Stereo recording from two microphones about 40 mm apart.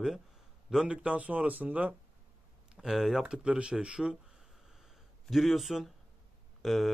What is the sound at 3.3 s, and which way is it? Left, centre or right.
Speech, right.